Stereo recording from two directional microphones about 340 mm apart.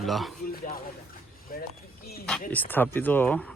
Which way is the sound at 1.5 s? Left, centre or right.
Left.